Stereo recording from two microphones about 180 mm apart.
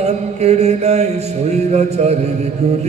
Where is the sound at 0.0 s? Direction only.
35° right (ahead or behind).